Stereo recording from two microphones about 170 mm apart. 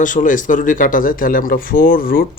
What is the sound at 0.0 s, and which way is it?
Speech, 50° left (ahead or behind).